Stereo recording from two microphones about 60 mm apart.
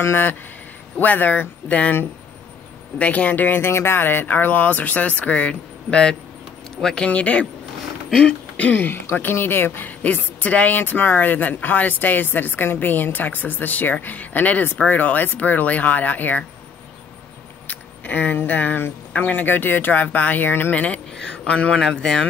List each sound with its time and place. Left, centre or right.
0.0 s a woman's voice: left
3.0 s speech: left; by 7.1 s centre
7.1 s a woman's voice: left
17.6 s a woman's voice: left
20.7 s speech: left